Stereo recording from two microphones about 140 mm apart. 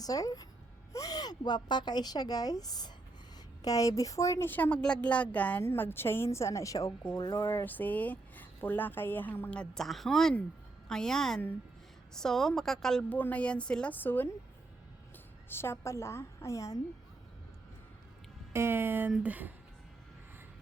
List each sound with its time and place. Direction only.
0.0 s a woman's voice: 25° left (ahead or behind)
15.4 s speech: 15° left (ahead or behind)
18.5 s a sound: 15° right (ahead or behind)